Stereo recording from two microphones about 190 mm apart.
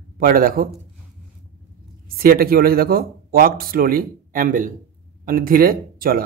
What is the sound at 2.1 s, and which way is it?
Speech, 50° right (ahead or behind).